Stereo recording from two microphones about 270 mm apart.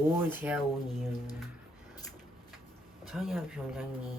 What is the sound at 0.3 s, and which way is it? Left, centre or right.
Speech, centre.